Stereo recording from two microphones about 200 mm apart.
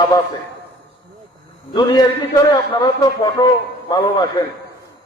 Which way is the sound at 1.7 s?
20° left (ahead or behind).